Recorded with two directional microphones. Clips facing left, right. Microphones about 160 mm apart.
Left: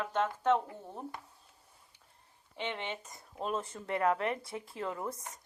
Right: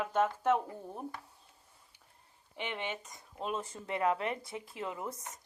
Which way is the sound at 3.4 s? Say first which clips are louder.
Left 1 dB; 30° left (ahead or behind).